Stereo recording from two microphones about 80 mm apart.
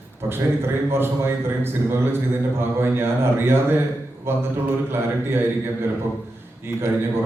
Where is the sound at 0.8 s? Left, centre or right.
Right.